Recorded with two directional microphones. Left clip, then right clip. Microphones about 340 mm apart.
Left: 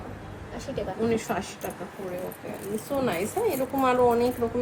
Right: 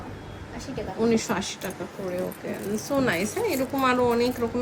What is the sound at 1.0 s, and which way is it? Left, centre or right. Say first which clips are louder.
Speech: right 4 dB; right.